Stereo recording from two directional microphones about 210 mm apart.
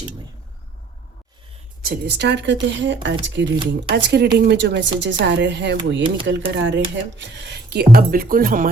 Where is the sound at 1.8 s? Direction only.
50° right (ahead or behind).